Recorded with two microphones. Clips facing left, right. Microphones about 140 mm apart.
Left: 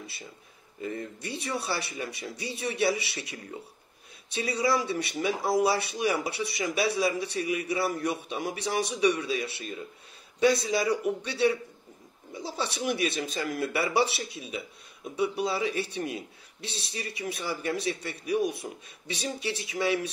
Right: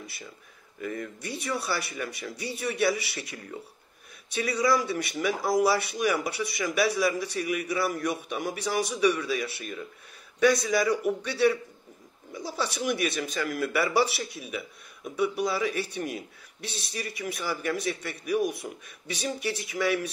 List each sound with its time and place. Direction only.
0.7 s speech: 25° left (ahead or behind)